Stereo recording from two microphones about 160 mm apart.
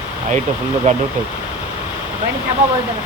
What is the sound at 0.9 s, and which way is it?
Speech, 50° right (ahead or behind).